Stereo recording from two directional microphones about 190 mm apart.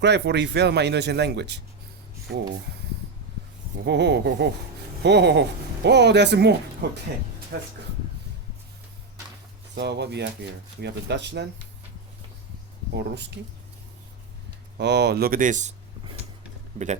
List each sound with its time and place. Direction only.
0.0 s speech: 65° right (ahead or behind)
3.8 s speech: 65° right (ahead or behind)
9.7 s speech: 60° right (ahead or behind)
13.0 s speech: 65° right (ahead or behind)
14.8 s speech: 60° right (ahead or behind); by 15.7 s 40° right (ahead or behind)
16.7 s speech: 35° right (ahead or behind)